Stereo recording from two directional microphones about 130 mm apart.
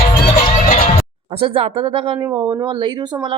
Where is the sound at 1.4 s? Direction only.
45° right (ahead or behind).